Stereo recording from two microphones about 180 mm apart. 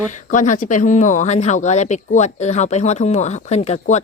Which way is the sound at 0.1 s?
45° left (ahead or behind).